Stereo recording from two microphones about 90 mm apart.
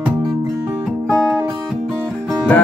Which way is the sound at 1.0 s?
25° right (ahead or behind).